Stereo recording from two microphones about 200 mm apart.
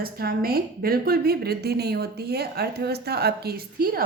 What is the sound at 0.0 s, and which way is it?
A woman's voice, 50° right (ahead or behind).